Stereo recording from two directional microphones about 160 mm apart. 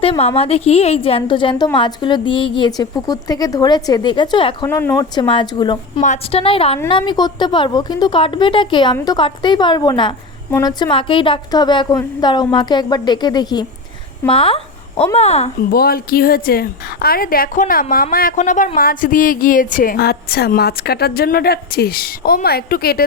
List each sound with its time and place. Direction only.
0.0 s a woman's voice: 40° left (ahead or behind)
4.6 s speech: 15° left (ahead or behind)
5.1 s a woman's voice: 30° left (ahead or behind)
6.0 s a woman's voice: 50° left (ahead or behind)
6.4 s a woman's voice: 35° left (ahead or behind)
15.7 s a woman's voice: 70° left (ahead or behind)